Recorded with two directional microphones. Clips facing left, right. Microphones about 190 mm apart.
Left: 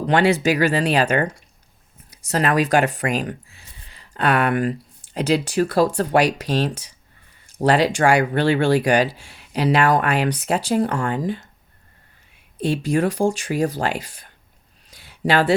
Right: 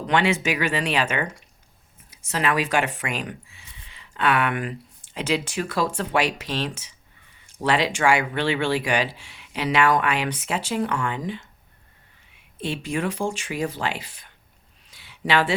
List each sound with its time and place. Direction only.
0.1 s speech: 40° left (ahead or behind)
12.5 s speech: 40° left (ahead or behind)
14.8 s a sound: 40° left (ahead or behind)